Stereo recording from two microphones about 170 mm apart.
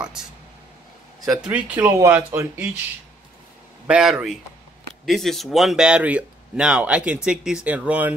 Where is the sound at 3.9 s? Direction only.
5° right (ahead or behind).